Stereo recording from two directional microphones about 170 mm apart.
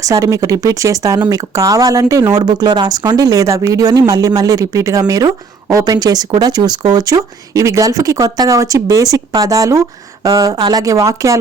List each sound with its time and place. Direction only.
0.0 s speech: 20° right (ahead or behind)